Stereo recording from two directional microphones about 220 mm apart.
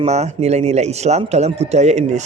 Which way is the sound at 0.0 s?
30° right (ahead or behind).